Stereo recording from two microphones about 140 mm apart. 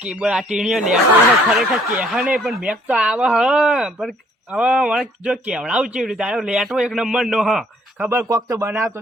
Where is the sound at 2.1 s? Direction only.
5° right (ahead or behind).